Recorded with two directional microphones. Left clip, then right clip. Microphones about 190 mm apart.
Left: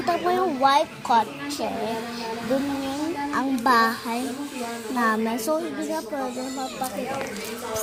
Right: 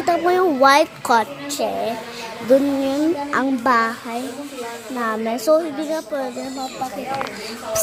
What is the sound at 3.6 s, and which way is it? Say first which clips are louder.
Speech: left 1 dB; 15° right (ahead or behind).